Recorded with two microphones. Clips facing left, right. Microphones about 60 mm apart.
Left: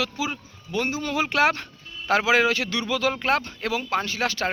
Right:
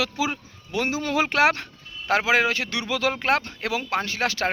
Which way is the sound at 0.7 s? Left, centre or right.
Right.